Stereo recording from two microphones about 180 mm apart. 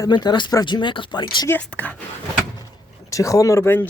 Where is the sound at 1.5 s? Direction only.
10° left (ahead or behind).